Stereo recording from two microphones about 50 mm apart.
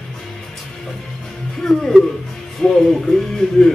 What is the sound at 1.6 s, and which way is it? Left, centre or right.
Speech, centre.